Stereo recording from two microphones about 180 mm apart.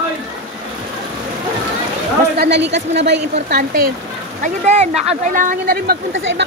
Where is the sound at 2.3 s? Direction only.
70° right (ahead or behind).